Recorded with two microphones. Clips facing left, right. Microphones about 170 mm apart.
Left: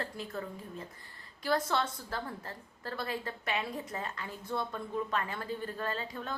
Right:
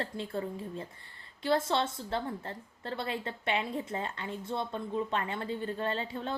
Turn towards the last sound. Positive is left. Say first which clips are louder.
# right 3 dB
turn(degrees=-30)  # may be behind; listen again after turning